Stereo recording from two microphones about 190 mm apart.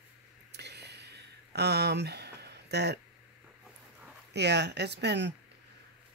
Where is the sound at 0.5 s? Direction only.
60° right (ahead or behind).